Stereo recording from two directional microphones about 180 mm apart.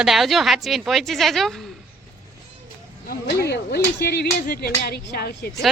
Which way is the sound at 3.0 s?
60° left (ahead or behind).